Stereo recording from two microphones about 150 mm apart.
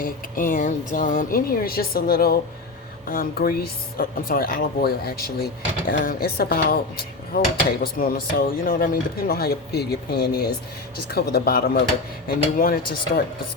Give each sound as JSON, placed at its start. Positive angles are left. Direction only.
{"t": 0.0, "sound": "speech", "side_deg": 65}
{"t": 3.1, "sound": "speech", "side_deg": 75}
{"t": 12.5, "sound": "speech", "side_deg": 75}